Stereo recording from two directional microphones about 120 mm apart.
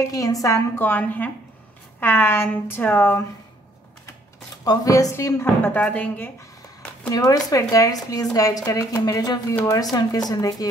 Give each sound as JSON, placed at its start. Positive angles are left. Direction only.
{"t": 0.0, "sound": "a woman's voice", "side_deg": 30}
{"t": 4.6, "sound": "a woman's voice", "side_deg": 30}
{"t": 7.1, "sound": "a woman's voice", "side_deg": 30}